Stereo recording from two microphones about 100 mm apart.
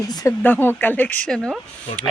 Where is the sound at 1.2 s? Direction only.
5° left (ahead or behind).